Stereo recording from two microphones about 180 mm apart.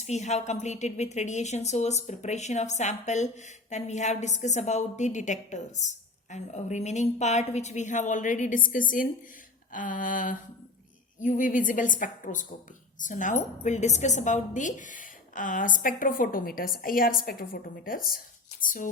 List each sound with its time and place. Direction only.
0.0 s a woman's voice: 40° left (ahead or behind)